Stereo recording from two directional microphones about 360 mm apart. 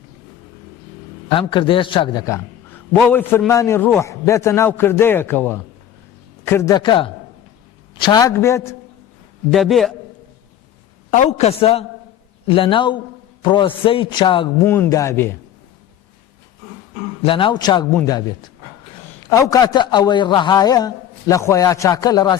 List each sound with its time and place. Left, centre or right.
1.4 s a man's voice: centre
11.2 s a man's voice: centre
17.2 s a man's voice: centre